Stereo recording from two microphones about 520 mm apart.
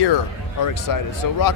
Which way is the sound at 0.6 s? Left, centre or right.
Left.